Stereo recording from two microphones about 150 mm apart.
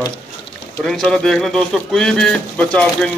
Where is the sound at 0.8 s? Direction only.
5° left (ahead or behind).